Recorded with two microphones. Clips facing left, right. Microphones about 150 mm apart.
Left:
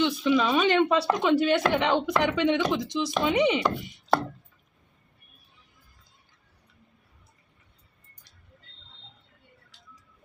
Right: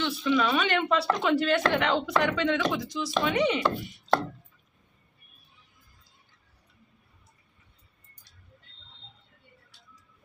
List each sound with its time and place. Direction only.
0.0 s speech: 15° left (ahead or behind)